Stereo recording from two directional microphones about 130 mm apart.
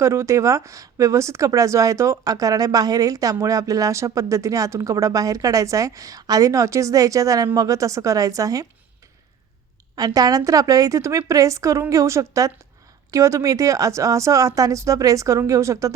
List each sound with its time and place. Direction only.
0.0 s speech: 20° right (ahead or behind)
9.9 s speech: 30° right (ahead or behind)